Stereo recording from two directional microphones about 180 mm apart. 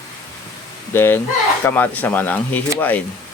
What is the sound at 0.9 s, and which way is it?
Speech, 10° left (ahead or behind).